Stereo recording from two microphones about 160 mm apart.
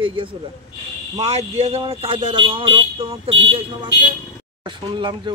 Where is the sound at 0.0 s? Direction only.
35° right (ahead or behind).